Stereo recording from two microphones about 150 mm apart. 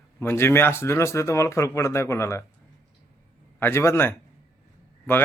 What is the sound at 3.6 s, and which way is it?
Speech, 15° left (ahead or behind).